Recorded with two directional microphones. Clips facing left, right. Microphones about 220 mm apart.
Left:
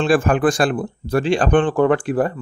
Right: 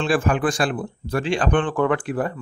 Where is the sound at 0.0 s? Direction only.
45° left (ahead or behind).